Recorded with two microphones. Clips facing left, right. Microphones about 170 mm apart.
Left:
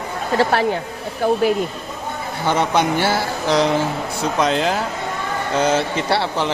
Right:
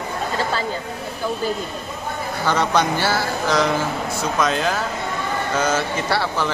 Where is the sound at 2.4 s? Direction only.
20° left (ahead or behind).